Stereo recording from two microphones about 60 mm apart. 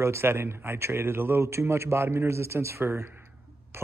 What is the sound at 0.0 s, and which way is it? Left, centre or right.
Speech, right.